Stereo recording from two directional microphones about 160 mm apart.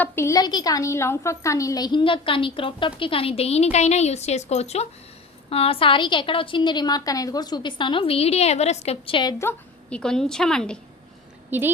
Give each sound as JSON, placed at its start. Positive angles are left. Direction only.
{"t": 0.0, "sound": "a woman's voice", "side_deg": 15}
{"t": 9.4, "sound": "a sound", "side_deg": 15}
{"t": 10.0, "sound": "a woman's voice", "side_deg": 5}
{"t": 11.5, "sound": "a woman's voice", "side_deg": -10}